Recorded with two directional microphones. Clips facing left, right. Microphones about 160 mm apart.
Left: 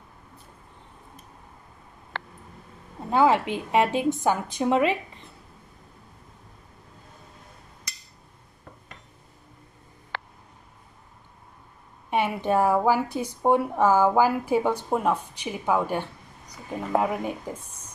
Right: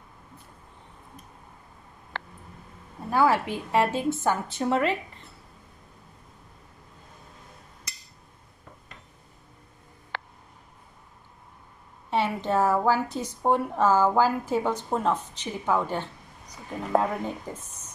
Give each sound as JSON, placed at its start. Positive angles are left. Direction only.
{"t": 2.1, "sound": "a sound", "side_deg": 75}
{"t": 3.1, "sound": "a woman's voice", "side_deg": 20}
{"t": 12.1, "sound": "a woman's voice", "side_deg": 15}